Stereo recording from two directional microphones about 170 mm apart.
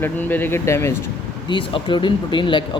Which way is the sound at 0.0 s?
10° left (ahead or behind).